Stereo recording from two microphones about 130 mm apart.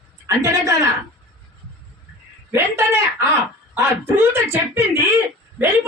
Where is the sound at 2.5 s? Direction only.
20° right (ahead or behind).